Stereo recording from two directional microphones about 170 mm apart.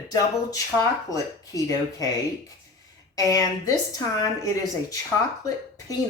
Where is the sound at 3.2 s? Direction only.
20° left (ahead or behind).